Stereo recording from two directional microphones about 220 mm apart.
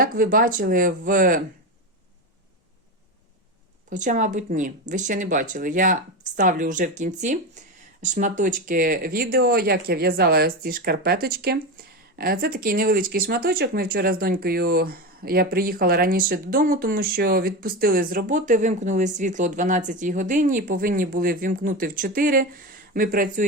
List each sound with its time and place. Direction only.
0.0 s speech: 40° right (ahead or behind)
3.8 s speech: 35° right (ahead or behind)